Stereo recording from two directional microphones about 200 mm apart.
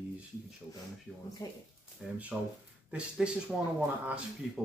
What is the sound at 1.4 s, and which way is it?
Speech, 20° left (ahead or behind).